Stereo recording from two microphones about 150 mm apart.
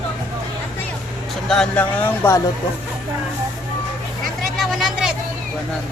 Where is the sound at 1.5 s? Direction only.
5° left (ahead or behind).